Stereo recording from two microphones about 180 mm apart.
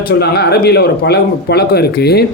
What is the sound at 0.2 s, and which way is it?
Speech, 65° left (ahead or behind).